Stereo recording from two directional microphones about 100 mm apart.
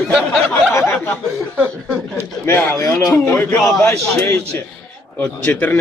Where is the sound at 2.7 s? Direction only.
35° left (ahead or behind).